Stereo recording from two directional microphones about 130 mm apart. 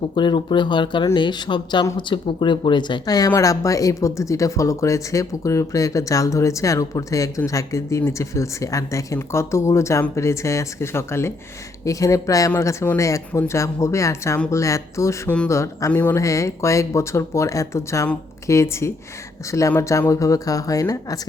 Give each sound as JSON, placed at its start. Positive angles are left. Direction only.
{"t": 0.2, "sound": "speech", "side_deg": 35}